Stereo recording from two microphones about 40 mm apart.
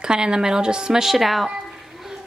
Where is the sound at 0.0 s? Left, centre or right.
Centre.